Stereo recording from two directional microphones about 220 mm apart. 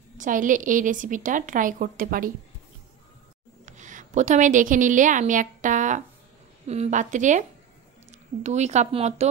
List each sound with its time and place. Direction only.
0.2 s speech: 35° right (ahead or behind)
3.6 s a woman's voice: 35° right (ahead or behind)